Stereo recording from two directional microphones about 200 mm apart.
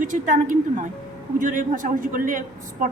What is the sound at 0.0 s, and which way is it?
A man's voice, 40° right (ahead or behind).